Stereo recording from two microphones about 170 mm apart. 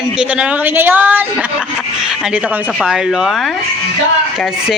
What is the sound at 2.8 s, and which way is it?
Speech, centre (ahead or behind).